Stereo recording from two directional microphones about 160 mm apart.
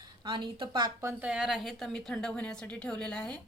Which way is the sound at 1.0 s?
15° right (ahead or behind).